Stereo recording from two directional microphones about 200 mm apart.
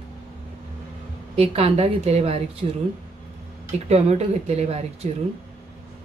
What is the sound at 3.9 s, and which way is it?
Speech, 30° right (ahead or behind).